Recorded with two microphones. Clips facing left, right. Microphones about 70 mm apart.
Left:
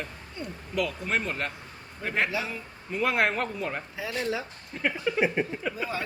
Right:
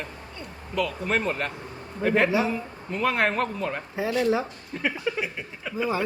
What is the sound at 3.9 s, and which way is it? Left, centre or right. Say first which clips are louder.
Speech: right 10 dB; right.